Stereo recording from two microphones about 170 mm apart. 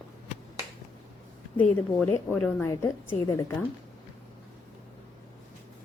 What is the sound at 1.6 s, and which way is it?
A woman's voice, 10° left (ahead or behind).